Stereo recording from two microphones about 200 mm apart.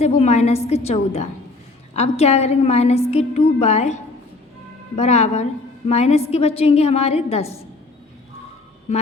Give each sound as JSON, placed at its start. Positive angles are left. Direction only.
{"t": 0.0, "sound": "a woman's voice", "side_deg": 35}
{"t": 4.9, "sound": "a woman's voice", "side_deg": 35}